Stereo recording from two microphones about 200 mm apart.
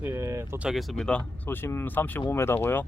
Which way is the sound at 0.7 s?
Centre (ahead or behind).